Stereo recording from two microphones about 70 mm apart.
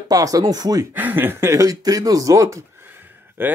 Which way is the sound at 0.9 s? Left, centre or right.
Right.